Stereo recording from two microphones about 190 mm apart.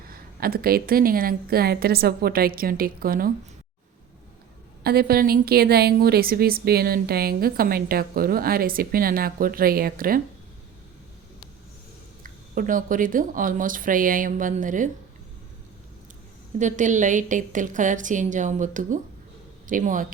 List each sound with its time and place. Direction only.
0.1 s a woman's voice: 50° right (ahead or behind)
4.8 s a woman's voice: 55° right (ahead or behind)
12.2 s a woman's voice: 45° right (ahead or behind)
16.6 s a woman's voice: 40° right (ahead or behind)